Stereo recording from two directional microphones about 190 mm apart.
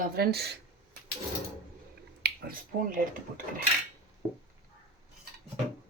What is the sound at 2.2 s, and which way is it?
Speech, 50° right (ahead or behind).